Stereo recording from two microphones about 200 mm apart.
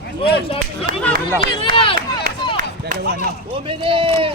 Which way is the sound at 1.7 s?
25° left (ahead or behind).